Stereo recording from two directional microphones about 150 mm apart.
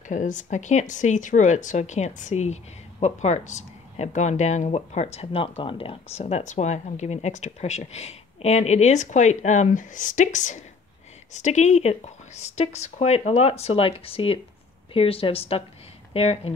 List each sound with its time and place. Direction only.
0.1 s speech: 55° left (ahead or behind); by 16.5 s 40° left (ahead or behind)